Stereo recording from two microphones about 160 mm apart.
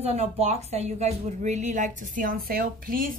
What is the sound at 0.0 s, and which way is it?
Speech, 40° right (ahead or behind).